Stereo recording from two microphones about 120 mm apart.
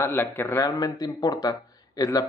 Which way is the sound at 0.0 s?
20° left (ahead or behind).